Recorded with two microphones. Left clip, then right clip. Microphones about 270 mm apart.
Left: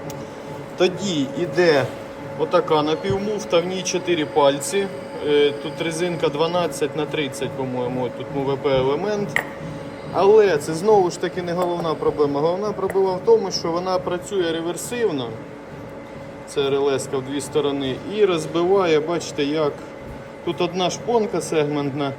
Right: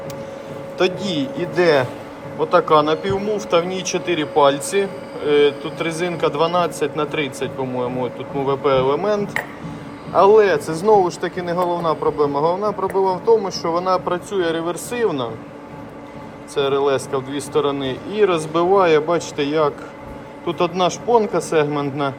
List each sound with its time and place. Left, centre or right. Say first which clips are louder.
0.8 s a man's voice: right 1 dB; centre
16.6 s a man's voice: right 2 dB; centre